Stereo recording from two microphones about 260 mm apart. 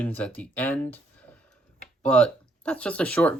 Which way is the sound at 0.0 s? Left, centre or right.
Centre.